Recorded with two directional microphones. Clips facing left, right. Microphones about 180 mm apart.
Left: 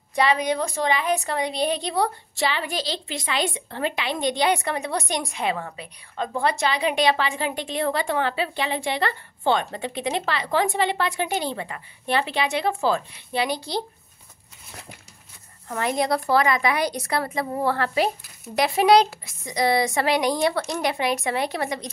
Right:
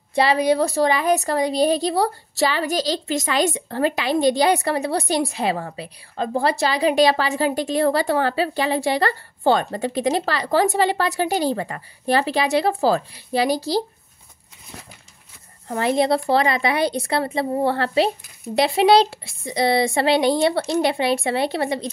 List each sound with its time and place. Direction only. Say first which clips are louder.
0.1 s a woman's voice: right 4 dB; 30° right (ahead or behind)
15.7 s a woman's voice: right 5 dB; 30° right (ahead or behind)